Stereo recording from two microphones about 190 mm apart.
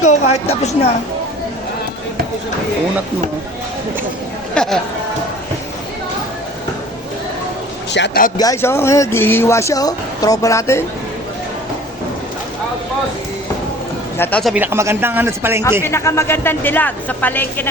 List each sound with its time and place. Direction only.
0.0 s speech: 35° left (ahead or behind)
4.5 s speech: 5° left (ahead or behind)
7.9 s speech: 65° left (ahead or behind)
8.4 s speech: 15° left (ahead or behind)
14.2 s speech: 5° left (ahead or behind)
14.5 s a man's voice: 10° right (ahead or behind)
15.8 s speech: 15° left (ahead or behind)